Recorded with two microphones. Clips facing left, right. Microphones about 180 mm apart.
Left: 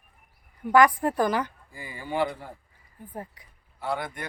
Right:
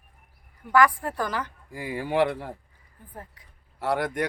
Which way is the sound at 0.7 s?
20° left (ahead or behind).